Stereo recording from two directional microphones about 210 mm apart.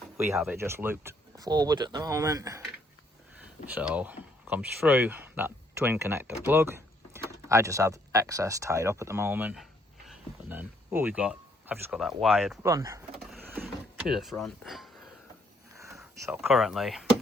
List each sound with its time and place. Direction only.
0.5 s speech: 10° right (ahead or behind)
12.6 s speech: 15° right (ahead or behind)
13.3 s a sound: 10° right (ahead or behind)
14.1 s speech: centre (ahead or behind)
15.8 s speech: 15° right (ahead or behind)